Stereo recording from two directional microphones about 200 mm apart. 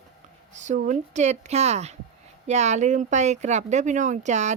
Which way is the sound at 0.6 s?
35° right (ahead or behind).